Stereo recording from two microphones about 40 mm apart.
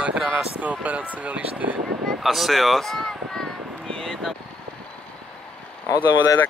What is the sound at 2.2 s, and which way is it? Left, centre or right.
Speech, centre.